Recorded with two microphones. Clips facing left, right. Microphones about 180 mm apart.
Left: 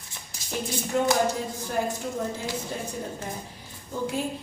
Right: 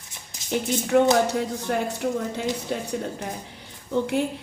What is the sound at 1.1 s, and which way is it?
A woman's voice, 70° right (ahead or behind).